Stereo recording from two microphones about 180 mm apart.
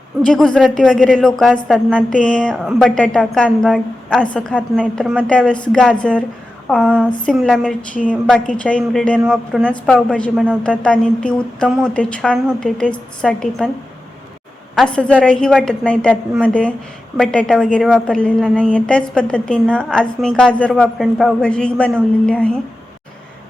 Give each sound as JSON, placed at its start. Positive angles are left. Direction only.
{"t": 0.2, "sound": "a woman's voice", "side_deg": 5}
{"t": 14.8, "sound": "a woman's voice", "side_deg": 5}